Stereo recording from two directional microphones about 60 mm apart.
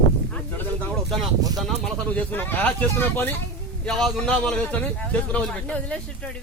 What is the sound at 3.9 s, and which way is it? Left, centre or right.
A man's voice, centre.